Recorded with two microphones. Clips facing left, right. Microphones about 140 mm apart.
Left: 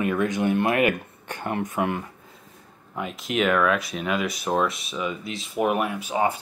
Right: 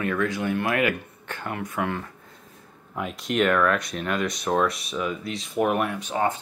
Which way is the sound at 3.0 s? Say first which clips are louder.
Right 1 dB; centre (ahead or behind).